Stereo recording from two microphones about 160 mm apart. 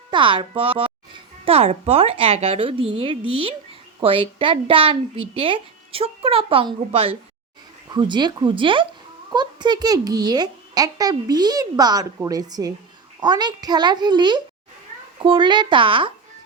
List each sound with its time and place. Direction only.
0.1 s a child's voice: 30° right (ahead or behind)